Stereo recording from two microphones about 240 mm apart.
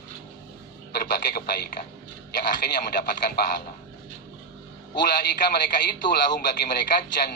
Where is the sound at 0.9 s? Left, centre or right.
Left.